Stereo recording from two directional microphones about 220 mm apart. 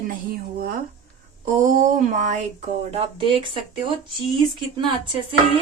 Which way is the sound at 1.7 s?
35° right (ahead or behind).